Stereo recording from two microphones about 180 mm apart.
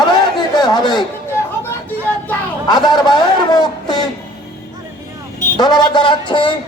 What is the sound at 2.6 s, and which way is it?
A man's voice, 25° left (ahead or behind).